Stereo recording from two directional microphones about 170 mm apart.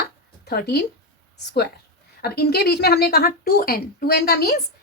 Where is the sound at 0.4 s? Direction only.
70° left (ahead or behind).